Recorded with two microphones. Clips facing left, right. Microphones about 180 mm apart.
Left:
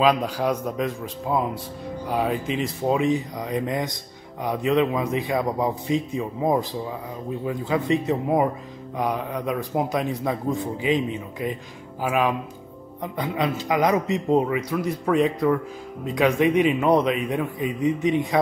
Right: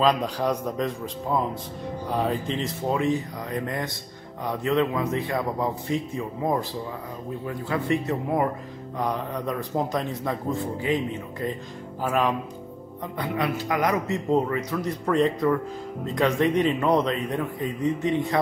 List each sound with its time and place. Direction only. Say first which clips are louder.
0.0 s a man's voice: left 2 dB; 5° left (ahead or behind)
13.2 s a man's voice: left 1 dB; 20° left (ahead or behind)